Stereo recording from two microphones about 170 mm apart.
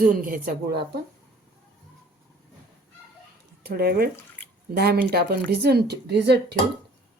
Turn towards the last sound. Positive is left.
turn(degrees=-70)  # may be behind; listen again after turning